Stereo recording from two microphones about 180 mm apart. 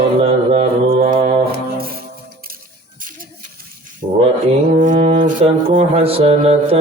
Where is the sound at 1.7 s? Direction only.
55° right (ahead or behind).